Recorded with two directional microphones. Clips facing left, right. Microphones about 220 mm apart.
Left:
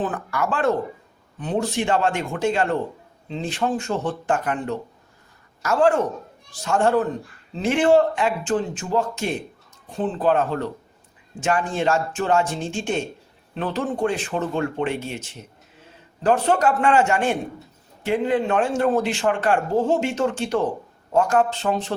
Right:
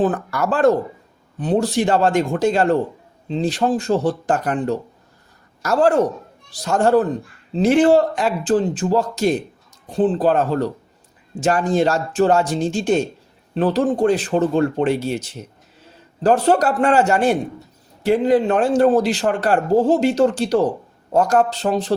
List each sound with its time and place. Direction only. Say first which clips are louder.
0.0 s a man's voice: right 6 dB; 40° right (ahead or behind)